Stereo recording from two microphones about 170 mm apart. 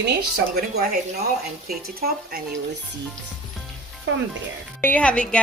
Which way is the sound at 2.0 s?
65° right (ahead or behind).